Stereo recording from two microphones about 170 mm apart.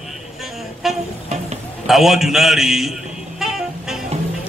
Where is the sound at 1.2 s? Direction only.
40° right (ahead or behind).